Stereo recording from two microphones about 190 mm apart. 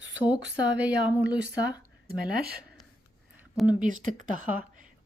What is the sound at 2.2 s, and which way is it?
Speech, 55° right (ahead or behind).